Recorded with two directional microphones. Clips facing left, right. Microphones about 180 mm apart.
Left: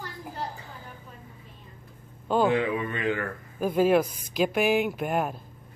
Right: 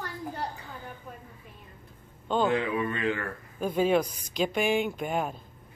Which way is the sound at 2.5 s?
25° left (ahead or behind).